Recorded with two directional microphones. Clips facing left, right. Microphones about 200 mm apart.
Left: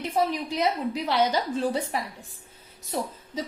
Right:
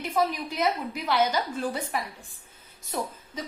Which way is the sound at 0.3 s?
30° left (ahead or behind).